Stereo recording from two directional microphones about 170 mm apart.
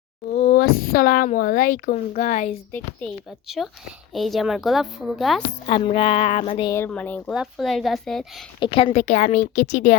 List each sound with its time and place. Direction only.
0.4 s a child's voice: 65° left (ahead or behind)
3.6 s a woman's voice: centre (ahead or behind)
5.6 s a woman's voice: 30° left (ahead or behind)
6.7 s a woman's voice: 15° left (ahead or behind)
8.5 s a woman's voice: 30° left (ahead or behind)